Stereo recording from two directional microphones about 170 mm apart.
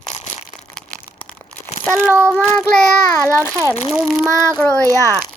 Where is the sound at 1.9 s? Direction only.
15° right (ahead or behind).